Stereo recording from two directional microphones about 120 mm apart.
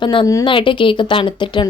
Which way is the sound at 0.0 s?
45° left (ahead or behind).